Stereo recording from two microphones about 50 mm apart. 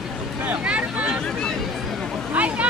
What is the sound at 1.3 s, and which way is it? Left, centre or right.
Hubbub, centre.